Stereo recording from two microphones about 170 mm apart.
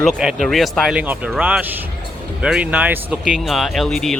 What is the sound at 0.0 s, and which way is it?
Speech, centre (ahead or behind).